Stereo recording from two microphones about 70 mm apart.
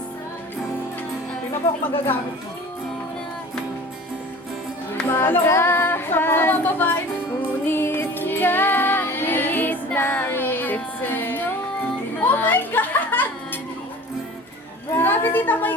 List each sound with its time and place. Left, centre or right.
5.1 s music: left
14.9 s a woman's voice: left